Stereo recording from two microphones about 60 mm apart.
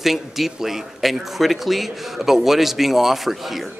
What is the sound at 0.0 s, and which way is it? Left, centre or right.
A man's voice, centre.